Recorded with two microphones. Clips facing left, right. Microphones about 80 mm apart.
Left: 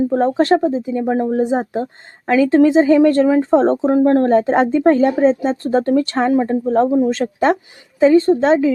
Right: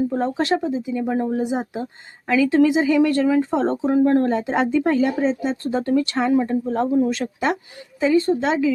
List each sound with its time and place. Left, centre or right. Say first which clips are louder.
0.1 s speech: left 7 dB; left